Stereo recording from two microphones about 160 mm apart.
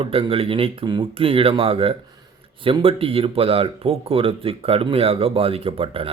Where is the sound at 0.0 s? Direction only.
35° right (ahead or behind).